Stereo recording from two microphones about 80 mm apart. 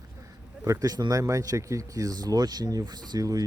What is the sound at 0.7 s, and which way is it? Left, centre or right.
Speech, right.